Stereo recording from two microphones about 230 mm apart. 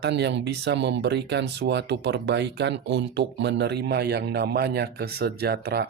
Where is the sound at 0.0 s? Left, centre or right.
Right.